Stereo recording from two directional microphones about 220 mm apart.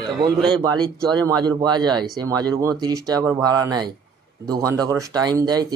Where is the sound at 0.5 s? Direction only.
20° right (ahead or behind).